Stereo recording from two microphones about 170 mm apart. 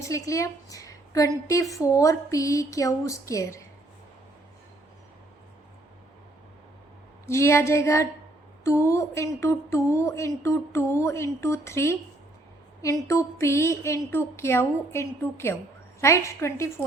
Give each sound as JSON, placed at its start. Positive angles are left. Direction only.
{"t": 0.0, "sound": "a woman's voice", "side_deg": 20}
{"t": 7.3, "sound": "speech", "side_deg": 15}